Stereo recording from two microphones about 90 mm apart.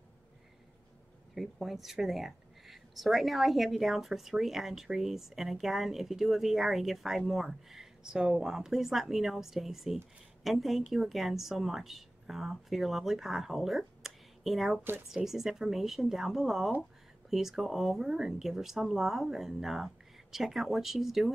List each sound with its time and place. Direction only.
1.3 s a woman's voice: centre (ahead or behind)
14.8 s speech: 25° right (ahead or behind)
15.0 s a woman's voice: 5° right (ahead or behind)